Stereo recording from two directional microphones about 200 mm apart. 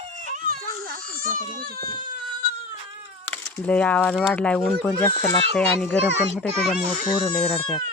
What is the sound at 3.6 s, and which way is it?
Speech, 5° left (ahead or behind).